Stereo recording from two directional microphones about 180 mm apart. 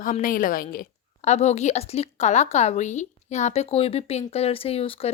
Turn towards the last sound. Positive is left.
turn(degrees=35)  # may be behind; listen again after turning